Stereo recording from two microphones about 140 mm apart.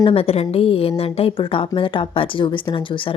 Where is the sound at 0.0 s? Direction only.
45° left (ahead or behind).